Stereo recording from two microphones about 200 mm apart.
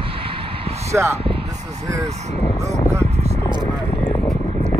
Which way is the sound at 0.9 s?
15° right (ahead or behind).